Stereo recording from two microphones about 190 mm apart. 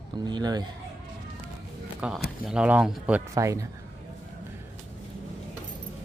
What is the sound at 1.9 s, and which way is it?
Speech, 5° right (ahead or behind).